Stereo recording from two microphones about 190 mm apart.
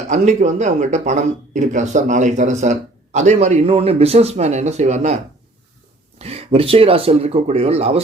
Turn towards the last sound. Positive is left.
turn(degrees=-30)  # may be behind; listen again after turning